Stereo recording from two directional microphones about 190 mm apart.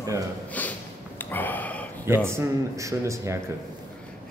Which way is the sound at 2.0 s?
15° right (ahead or behind).